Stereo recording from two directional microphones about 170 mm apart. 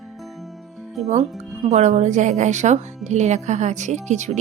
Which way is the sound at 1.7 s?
40° right (ahead or behind).